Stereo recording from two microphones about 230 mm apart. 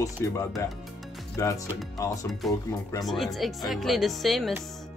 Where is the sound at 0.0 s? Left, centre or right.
Centre.